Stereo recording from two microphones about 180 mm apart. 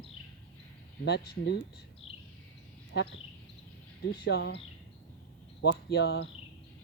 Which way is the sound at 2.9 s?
80° left.